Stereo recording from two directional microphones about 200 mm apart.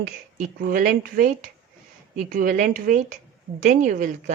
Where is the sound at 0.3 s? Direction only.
40° right (ahead or behind).